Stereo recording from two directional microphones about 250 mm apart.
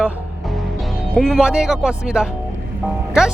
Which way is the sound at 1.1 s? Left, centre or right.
Centre.